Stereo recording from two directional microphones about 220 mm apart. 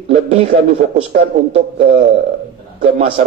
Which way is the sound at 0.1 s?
30° right (ahead or behind).